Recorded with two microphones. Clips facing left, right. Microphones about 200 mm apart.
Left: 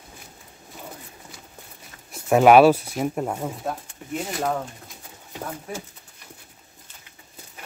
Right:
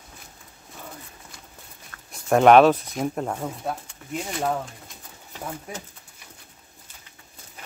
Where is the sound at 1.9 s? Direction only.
15° left (ahead or behind).